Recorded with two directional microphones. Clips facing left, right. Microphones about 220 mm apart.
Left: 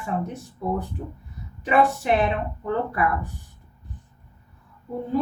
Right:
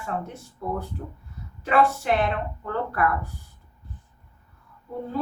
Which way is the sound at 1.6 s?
15° left (ahead or behind).